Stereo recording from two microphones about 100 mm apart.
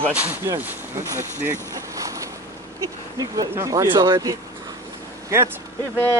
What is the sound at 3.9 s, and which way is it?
Speech, 55° right (ahead or behind).